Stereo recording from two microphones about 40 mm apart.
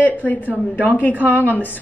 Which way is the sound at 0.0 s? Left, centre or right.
Left.